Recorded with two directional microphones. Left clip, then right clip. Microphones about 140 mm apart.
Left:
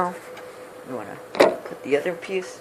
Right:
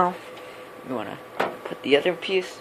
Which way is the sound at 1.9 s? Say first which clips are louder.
Right 3 dB; 60° right (ahead or behind).